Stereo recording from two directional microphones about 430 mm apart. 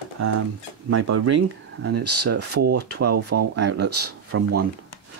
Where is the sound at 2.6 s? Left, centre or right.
Right.